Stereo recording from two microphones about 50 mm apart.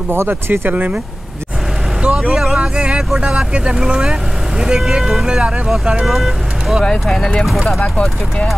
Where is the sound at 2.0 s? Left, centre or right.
Centre.